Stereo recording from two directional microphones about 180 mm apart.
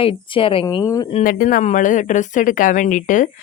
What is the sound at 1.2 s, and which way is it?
A woman's voice, 50° left (ahead or behind).